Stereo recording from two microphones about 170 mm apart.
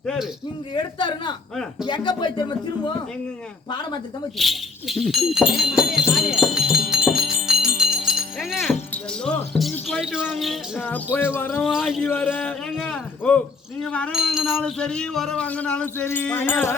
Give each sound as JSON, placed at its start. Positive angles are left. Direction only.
{"t": 0.0, "sound": "a sound", "side_deg": 5}
{"t": 0.7, "sound": "speech", "side_deg": 25}
{"t": 4.4, "sound": "speech", "side_deg": 0}
{"t": 7.1, "sound": "music", "side_deg": -5}
{"t": 9.7, "sound": "a sound", "side_deg": 5}
{"t": 10.8, "sound": "music", "side_deg": 10}
{"t": 11.6, "sound": "a man's voice", "side_deg": 0}